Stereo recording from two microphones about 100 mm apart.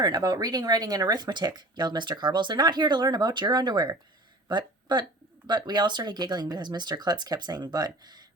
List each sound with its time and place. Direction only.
0.0 s speech: 45° right (ahead or behind)